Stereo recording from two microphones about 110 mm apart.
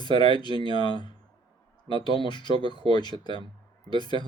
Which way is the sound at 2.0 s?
45° left (ahead or behind).